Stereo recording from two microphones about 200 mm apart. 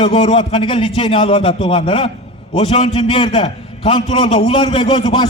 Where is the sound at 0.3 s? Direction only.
25° left (ahead or behind).